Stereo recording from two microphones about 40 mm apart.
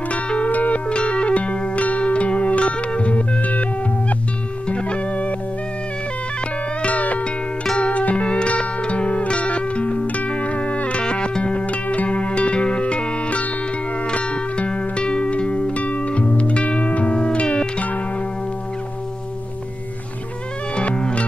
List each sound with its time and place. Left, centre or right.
0.1 s music: left
0.8 s music: left
4.6 s music: left
6.8 s music: left
11.6 s music: left
20.7 s music: left